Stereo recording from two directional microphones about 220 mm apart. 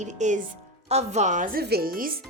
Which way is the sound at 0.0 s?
35° right (ahead or behind).